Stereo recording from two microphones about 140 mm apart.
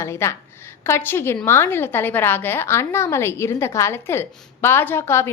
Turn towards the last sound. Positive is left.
turn(degrees=20)  # may be behind; listen again after turning